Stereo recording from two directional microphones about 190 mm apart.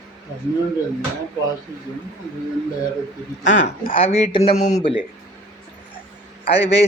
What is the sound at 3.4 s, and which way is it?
Speech, 45° left (ahead or behind).